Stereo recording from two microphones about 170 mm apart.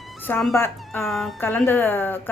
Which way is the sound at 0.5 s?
15° left (ahead or behind).